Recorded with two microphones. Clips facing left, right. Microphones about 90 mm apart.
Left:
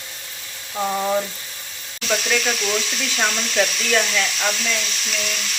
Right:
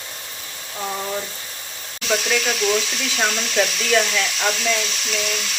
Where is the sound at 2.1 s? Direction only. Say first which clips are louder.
Even; centre (ahead or behind).